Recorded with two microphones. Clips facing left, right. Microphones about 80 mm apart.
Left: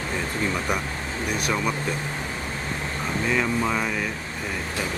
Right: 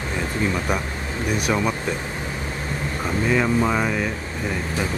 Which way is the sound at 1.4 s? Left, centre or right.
Centre.